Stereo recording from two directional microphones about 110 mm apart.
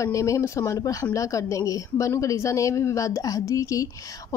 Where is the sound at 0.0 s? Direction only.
30° left (ahead or behind).